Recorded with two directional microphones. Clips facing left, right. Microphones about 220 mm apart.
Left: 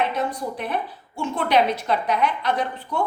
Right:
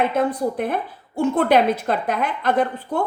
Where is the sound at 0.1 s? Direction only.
50° right (ahead or behind).